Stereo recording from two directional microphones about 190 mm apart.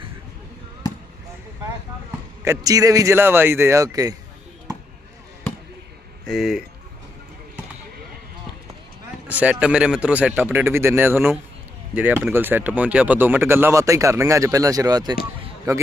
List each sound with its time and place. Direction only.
2.4 s speech: 15° right (ahead or behind)
6.2 s speech: centre (ahead or behind)
9.2 s speech: 10° right (ahead or behind)